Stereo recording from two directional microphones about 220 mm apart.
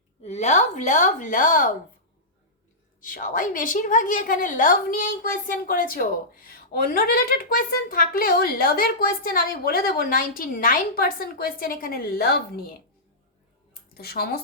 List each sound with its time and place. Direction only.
0.2 s a woman's voice: 30° left (ahead or behind)
3.0 s a woman's voice: 40° left (ahead or behind)
13.9 s speech: 45° left (ahead or behind)